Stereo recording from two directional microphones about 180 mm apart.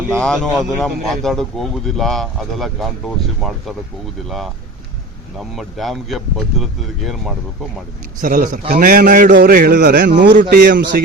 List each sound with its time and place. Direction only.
0.1 s a man's voice: 5° left (ahead or behind)
8.2 s a man's voice: 50° right (ahead or behind); by 10.1 s 65° right (ahead or behind)
10.5 s a man's voice: 55° right (ahead or behind)